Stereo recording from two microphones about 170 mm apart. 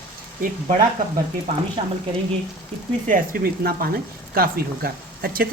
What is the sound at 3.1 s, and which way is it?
Speech, 55° right (ahead or behind).